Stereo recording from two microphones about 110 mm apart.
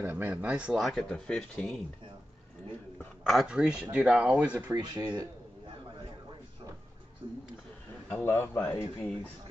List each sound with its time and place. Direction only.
0.0 s speech: 15° right (ahead or behind); by 1.8 s 5° left (ahead or behind)
3.3 s speech: 5° right (ahead or behind)
8.1 s speech: 20° left (ahead or behind)